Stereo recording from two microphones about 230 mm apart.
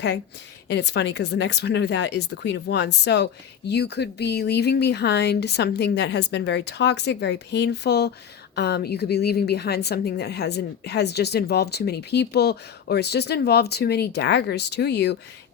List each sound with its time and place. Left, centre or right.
0.7 s a woman's voice: left